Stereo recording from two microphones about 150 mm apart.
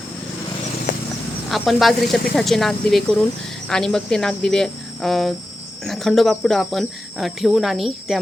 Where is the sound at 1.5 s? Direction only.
Centre (ahead or behind).